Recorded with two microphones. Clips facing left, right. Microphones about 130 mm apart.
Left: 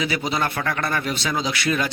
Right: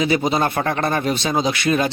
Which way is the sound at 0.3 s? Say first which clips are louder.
Right 5 dB; 25° right (ahead or behind).